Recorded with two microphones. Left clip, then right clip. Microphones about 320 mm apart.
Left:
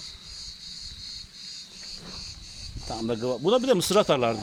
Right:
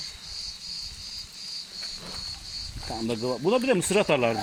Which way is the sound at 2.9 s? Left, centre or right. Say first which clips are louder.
Left 1 dB; left.